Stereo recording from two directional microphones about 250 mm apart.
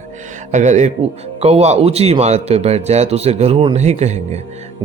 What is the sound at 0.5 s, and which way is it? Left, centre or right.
Speech, right.